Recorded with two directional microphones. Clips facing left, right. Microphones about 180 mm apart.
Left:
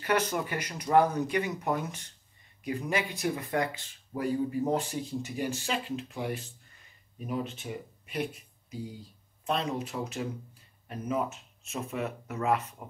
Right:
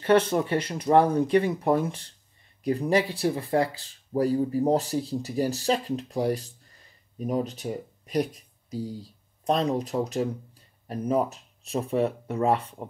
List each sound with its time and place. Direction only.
0.0 s speech: 25° right (ahead or behind)